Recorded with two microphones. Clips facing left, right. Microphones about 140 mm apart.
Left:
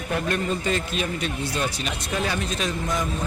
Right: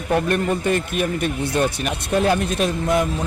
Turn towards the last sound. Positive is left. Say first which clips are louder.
# right 7 dB
turn(degrees=-60)  # may be behind; listen again after turning